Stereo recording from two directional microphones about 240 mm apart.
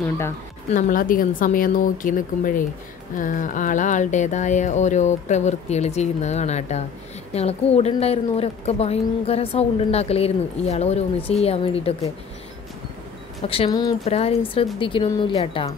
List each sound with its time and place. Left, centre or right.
0.7 s a woman's voice: left
13.4 s a woman's voice: left